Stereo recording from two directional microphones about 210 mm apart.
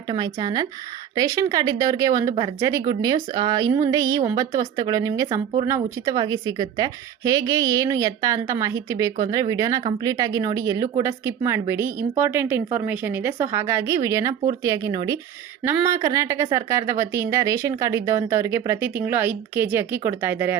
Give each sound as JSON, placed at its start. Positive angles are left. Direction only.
{"t": 0.1, "sound": "a woman's voice", "side_deg": -20}